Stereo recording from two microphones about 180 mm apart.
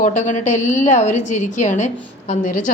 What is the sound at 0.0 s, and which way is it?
A woman's voice, 40° left (ahead or behind).